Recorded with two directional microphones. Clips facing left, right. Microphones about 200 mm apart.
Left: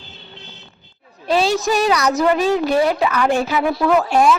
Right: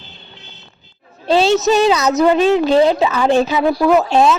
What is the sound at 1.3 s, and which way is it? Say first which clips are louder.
A woman's voice: right 4 dB; 25° right (ahead or behind).